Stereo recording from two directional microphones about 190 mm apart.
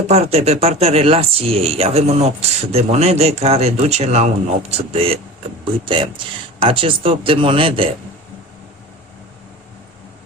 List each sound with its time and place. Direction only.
0.1 s speech: 30° right (ahead or behind)